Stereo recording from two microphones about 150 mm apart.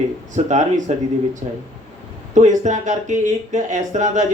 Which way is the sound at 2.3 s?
55° right (ahead or behind).